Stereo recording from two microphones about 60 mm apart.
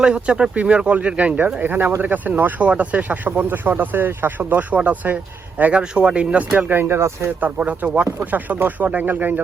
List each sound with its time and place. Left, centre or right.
0.0 s speech: centre
1.6 s speech: right
6.6 s speech: right
7.3 s speech: right